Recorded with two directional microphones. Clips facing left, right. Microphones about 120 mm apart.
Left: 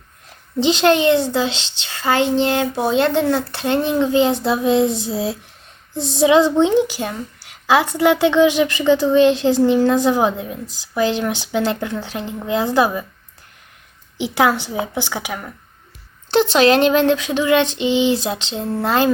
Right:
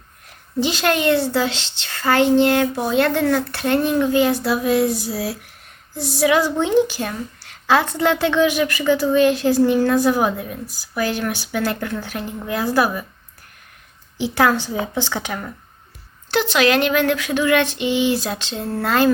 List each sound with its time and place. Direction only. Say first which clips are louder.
0.6 s a woman's voice: left 4 dB; 20° left (ahead or behind)
14.2 s a woman's voice: left 1 dB; 15° left (ahead or behind)
16.3 s a woman's voice: left 4 dB; 30° left (ahead or behind)